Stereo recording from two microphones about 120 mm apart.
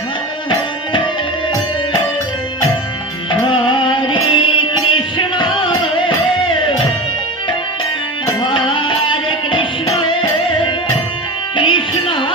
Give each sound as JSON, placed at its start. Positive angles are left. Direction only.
{"t": 3.5, "sound": "music", "side_deg": 45}
{"t": 8.4, "sound": "music", "side_deg": 45}
{"t": 11.5, "sound": "music", "side_deg": 45}